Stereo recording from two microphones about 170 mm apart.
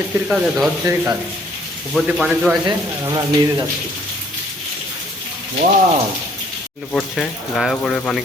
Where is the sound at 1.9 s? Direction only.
Centre (ahead or behind).